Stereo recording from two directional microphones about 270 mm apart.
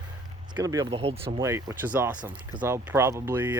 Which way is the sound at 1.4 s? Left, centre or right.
Centre.